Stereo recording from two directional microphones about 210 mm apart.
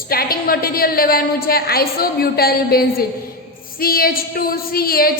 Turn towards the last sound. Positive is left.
turn(degrees=45)  # may be behind; listen again after turning